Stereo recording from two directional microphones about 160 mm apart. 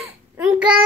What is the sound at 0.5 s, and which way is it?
Child singing, 5° right (ahead or behind).